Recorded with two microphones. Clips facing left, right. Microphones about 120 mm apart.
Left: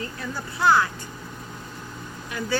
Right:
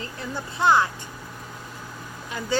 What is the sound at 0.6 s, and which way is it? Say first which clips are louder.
Speech: even; 20° right (ahead or behind).